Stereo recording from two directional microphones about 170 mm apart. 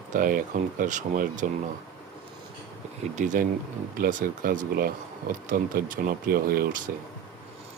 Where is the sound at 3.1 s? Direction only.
50° right (ahead or behind).